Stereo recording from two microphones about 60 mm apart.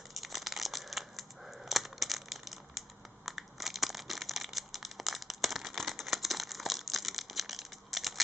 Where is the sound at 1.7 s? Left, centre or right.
Centre.